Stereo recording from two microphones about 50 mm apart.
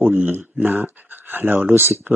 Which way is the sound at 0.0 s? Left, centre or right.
Right.